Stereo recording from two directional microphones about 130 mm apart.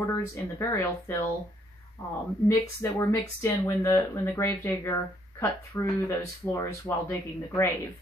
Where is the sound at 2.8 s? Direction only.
20° left (ahead or behind).